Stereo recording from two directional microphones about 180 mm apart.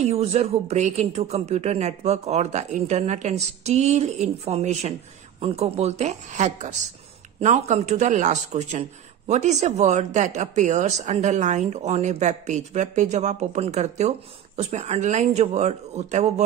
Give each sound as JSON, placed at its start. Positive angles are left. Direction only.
{"t": 0.0, "sound": "speech", "side_deg": -35}